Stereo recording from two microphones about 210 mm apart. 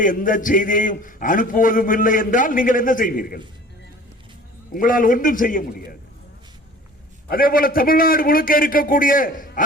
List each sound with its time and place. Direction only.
0.0 s a man's voice: 40° left (ahead or behind)
4.7 s a man's voice: 40° left (ahead or behind)
7.3 s a man's voice: 45° left (ahead or behind)